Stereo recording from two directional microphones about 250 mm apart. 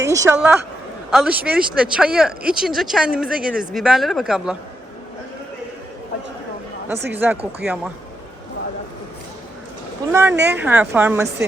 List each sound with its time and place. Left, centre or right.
0.0 s speech: centre
7.1 s a woman's voice: centre
10.1 s a woman's voice: centre
10.3 s a woman's voice: right
10.6 s a woman's voice: centre